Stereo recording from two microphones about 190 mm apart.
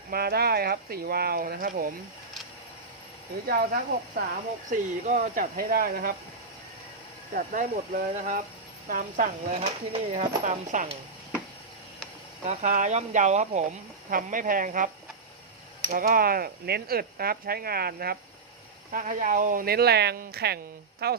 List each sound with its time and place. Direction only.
0.1 s speech: 55° right (ahead or behind)
3.4 s speech: 50° right (ahead or behind)
4.7 s speech: 40° right (ahead or behind)
7.3 s speech: 45° right (ahead or behind)
9.6 s speech: 35° right (ahead or behind)
12.5 s speech: 40° right (ahead or behind)
15.9 s speech: 50° right (ahead or behind)
18.9 s a woman's voice: 45° right (ahead or behind)